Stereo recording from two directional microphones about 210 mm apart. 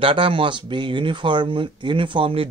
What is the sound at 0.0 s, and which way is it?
Speech, 25° right (ahead or behind).